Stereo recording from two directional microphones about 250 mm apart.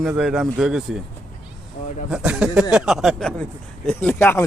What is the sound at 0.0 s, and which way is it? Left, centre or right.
Speech, centre.